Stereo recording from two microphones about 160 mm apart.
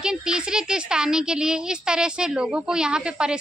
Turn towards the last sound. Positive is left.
turn(degrees=-5)  # may be behind; listen again after turning